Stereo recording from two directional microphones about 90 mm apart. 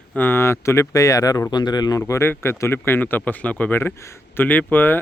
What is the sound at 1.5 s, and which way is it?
Speech, 50° left (ahead or behind).